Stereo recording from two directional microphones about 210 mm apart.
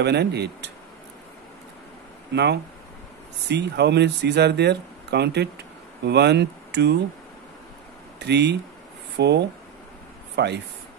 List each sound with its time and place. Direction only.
0.0 s speech: 50° right (ahead or behind)
2.3 s speech: 55° right (ahead or behind)
8.2 s speech: 55° right (ahead or behind)